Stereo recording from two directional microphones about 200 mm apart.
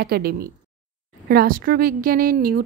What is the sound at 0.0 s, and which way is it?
Speech, 50° right (ahead or behind).